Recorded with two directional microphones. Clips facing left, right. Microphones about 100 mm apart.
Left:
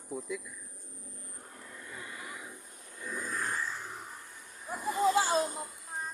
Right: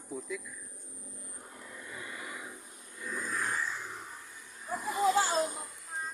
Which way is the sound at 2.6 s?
Centre (ahead or behind).